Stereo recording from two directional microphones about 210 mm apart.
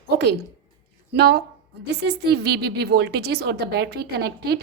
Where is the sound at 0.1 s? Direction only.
50° right (ahead or behind).